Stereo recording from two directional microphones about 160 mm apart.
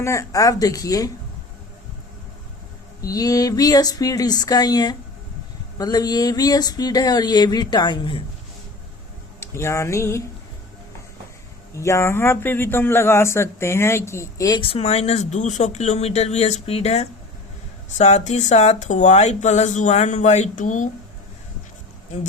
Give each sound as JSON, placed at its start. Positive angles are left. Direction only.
{"t": 0.0, "sound": "a man's voice", "side_deg": 20}
{"t": 3.0, "sound": "a man's voice", "side_deg": 20}
{"t": 9.4, "sound": "speech", "side_deg": 20}
{"t": 11.7, "sound": "a man's voice", "side_deg": 20}